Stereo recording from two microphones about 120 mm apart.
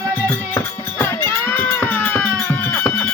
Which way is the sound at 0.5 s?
20° left (ahead or behind).